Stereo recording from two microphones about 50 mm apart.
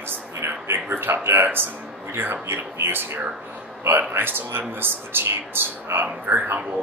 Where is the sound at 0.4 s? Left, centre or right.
Right.